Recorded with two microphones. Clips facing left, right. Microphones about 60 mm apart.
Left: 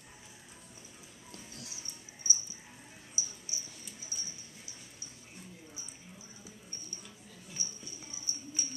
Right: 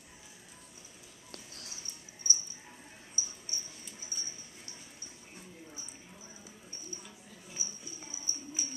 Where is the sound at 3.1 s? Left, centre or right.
Centre.